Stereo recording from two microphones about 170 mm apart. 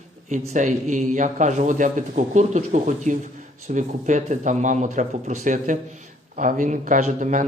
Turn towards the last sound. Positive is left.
turn(degrees=-50)  # may be behind; listen again after turning